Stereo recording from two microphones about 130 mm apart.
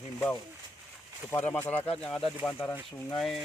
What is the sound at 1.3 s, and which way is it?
Speech, 10° left (ahead or behind).